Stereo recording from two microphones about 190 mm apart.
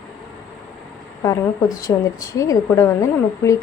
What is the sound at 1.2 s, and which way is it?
A woman's voice, 15° left (ahead or behind).